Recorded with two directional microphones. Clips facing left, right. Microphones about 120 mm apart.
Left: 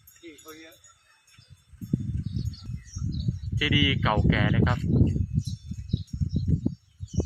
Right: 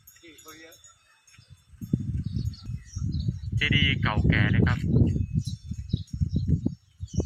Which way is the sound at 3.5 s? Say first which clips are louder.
Left 3 dB; 15° left (ahead or behind).